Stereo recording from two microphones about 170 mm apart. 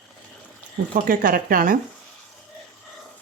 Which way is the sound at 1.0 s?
55° right (ahead or behind).